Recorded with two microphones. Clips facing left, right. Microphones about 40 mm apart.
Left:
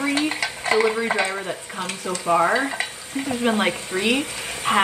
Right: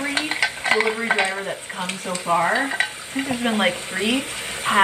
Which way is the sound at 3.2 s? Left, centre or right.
Right.